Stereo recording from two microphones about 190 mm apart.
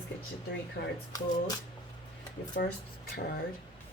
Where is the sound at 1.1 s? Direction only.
20° left (ahead or behind).